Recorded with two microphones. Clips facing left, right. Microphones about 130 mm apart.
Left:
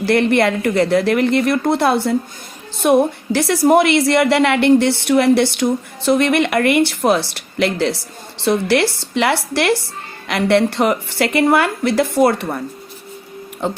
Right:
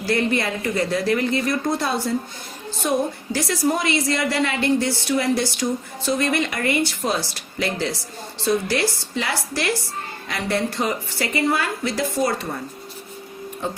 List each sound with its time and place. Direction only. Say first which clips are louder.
0.0 s a woman's voice: left 7 dB; 65° left (ahead or behind)